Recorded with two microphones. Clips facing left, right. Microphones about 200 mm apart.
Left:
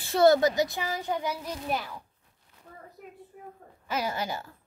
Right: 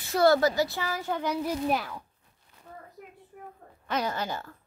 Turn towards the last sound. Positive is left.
turn(degrees=10)  # may be behind; listen again after turning